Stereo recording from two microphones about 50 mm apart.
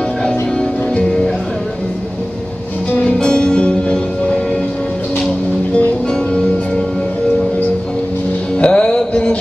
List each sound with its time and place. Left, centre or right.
2.9 s music: left
8.5 s music: centre